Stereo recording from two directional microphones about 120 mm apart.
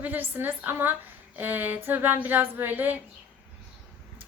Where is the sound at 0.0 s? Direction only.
15° right (ahead or behind).